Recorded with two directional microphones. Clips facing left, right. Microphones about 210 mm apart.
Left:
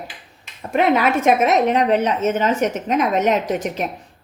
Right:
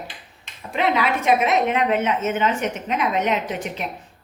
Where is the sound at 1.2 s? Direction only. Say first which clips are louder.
Left 2 dB; 40° left (ahead or behind).